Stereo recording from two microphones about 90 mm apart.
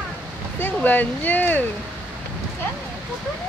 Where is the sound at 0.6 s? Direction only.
20° left (ahead or behind).